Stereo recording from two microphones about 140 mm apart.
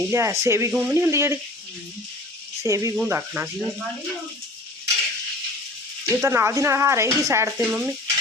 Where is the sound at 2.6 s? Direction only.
20° right (ahead or behind).